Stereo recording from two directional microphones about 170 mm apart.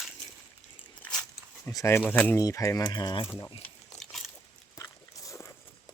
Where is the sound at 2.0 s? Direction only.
5° left (ahead or behind).